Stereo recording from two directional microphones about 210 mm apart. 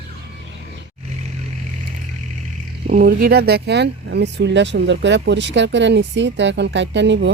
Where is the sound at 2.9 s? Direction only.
45° right (ahead or behind).